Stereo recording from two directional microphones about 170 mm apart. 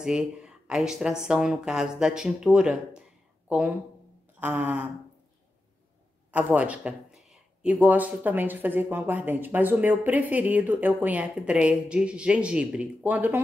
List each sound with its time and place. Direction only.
0.0 s speech: 5° right (ahead or behind)
6.3 s speech: 10° right (ahead or behind)